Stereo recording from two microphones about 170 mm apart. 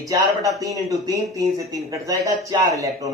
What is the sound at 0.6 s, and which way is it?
Speech, 20° right (ahead or behind).